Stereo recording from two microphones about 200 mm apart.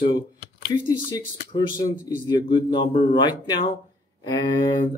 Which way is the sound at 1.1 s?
20° left (ahead or behind).